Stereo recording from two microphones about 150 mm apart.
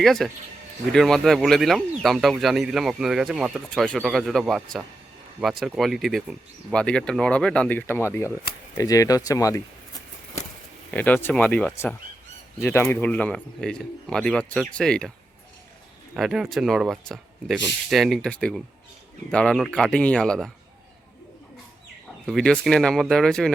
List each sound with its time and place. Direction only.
0.0 s speech: centre (ahead or behind); by 9.6 s 20° left (ahead or behind)
10.9 s speech: 10° left (ahead or behind)
16.1 s speech: 5° right (ahead or behind)
22.3 s speech: 5° left (ahead or behind)